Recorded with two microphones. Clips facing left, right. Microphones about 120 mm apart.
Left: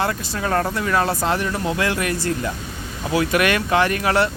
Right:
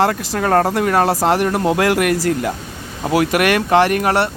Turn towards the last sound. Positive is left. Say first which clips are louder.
# right 5 dB
turn(degrees=-55)  # may be behind; listen again after turning